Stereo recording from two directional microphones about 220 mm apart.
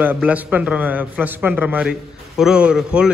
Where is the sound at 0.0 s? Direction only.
5° right (ahead or behind).